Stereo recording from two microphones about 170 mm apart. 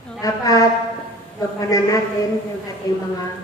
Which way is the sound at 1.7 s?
20° left (ahead or behind).